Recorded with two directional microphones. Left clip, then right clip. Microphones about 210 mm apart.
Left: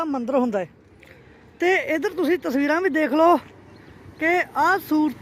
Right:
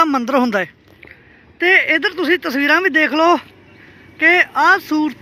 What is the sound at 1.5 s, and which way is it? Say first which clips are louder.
Speech: right 8 dB; 15° left (ahead or behind).